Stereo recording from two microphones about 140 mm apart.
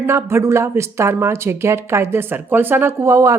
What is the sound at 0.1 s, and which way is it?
Speech, 20° right (ahead or behind).